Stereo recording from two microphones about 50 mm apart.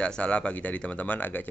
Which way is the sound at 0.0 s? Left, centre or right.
Left.